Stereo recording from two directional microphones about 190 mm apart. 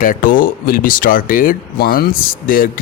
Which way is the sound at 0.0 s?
45° left (ahead or behind).